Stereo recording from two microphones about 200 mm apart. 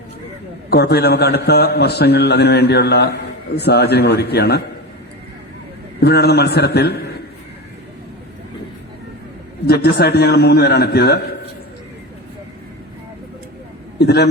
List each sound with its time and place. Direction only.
0.7 s a man's voice: 55° left (ahead or behind)
6.0 s a man's voice: 55° left (ahead or behind)
9.6 s a man's voice: 55° left (ahead or behind)
14.0 s a man's voice: 55° left (ahead or behind)